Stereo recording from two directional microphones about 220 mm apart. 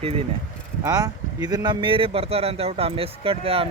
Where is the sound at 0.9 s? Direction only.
15° right (ahead or behind).